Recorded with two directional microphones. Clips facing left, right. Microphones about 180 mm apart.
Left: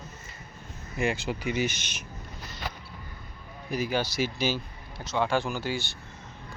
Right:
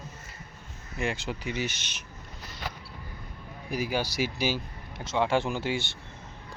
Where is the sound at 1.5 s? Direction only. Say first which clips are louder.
Left 4 dB; 15° left (ahead or behind).